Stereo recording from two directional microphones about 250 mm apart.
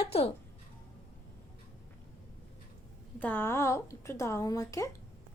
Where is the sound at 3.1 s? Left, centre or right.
Centre.